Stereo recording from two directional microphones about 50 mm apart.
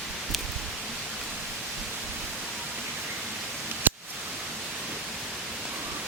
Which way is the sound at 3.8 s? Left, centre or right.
Right.